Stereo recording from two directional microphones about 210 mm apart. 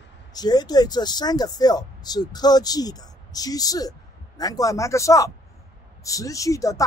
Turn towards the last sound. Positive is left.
turn(degrees=15)  # may be behind; listen again after turning